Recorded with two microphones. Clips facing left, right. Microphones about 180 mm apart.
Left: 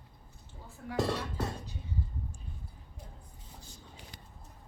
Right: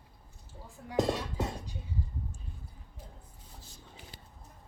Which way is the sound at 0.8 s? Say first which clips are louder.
Right 2 dB; 20° right (ahead or behind).